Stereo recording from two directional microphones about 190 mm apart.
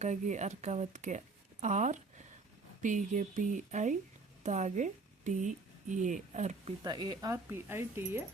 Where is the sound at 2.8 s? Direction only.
40° right (ahead or behind).